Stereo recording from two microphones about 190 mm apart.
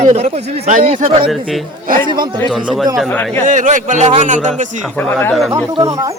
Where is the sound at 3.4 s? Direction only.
40° right (ahead or behind).